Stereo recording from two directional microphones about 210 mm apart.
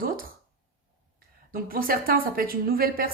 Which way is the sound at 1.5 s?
45° right (ahead or behind).